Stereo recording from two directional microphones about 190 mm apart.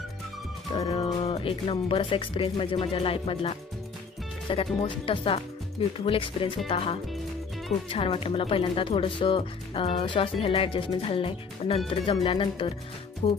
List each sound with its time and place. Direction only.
0.9 s speech: 30° left (ahead or behind)